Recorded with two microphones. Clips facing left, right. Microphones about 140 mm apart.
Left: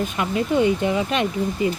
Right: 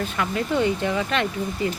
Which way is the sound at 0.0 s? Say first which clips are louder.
Left 2 dB; 20° left (ahead or behind).